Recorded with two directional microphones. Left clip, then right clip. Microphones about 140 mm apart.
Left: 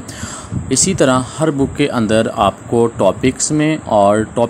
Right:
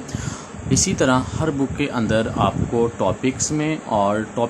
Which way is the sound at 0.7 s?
35° left (ahead or behind).